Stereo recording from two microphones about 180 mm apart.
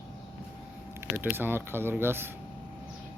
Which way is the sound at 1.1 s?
10° right (ahead or behind).